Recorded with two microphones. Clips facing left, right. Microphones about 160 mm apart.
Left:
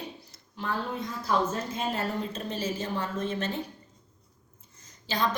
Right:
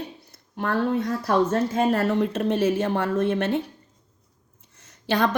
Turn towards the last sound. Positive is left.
turn(degrees=-65)  # may be behind; listen again after turning